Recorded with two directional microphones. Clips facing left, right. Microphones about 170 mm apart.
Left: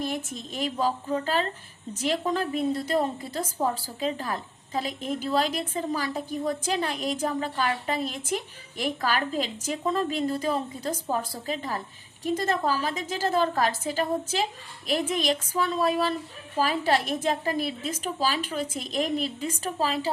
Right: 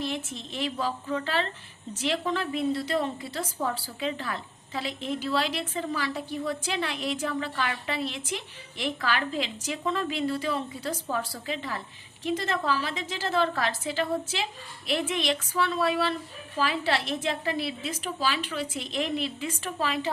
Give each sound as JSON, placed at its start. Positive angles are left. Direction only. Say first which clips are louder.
{"t": 0.0, "sound": "a woman's voice", "louder": "left 1 dB", "side_deg": 45}